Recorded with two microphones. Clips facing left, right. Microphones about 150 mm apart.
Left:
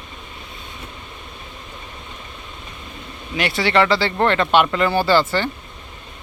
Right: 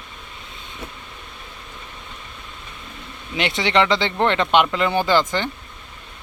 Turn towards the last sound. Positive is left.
turn(degrees=-15)  # may be behind; listen again after turning